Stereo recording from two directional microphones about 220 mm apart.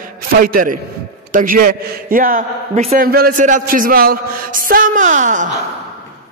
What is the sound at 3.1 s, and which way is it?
A man's voice, 45° right (ahead or behind).